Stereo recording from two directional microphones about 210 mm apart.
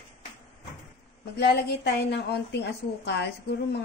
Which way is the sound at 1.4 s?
50° left (ahead or behind).